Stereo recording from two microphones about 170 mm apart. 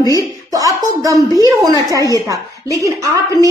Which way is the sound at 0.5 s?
20° right (ahead or behind).